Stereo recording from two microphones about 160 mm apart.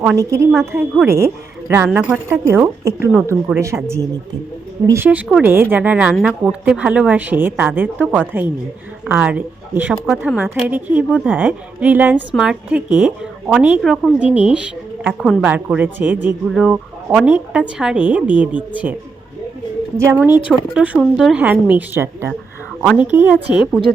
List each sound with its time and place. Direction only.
0.2 s a woman's voice: 20° right (ahead or behind)
4.9 s a woman's voice: 15° right (ahead or behind)
20.0 s a woman's voice: 15° right (ahead or behind)